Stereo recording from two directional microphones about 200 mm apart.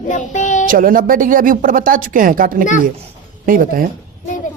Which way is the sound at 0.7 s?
45° right (ahead or behind).